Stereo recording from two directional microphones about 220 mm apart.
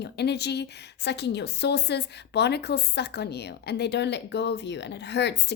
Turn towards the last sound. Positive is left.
turn(degrees=50)  # may be behind; listen again after turning